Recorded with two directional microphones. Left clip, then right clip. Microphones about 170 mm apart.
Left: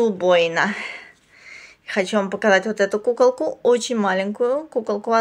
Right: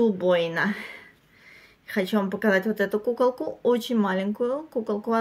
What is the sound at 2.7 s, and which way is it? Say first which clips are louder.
Speech: left 5 dB; 25° right (ahead or behind).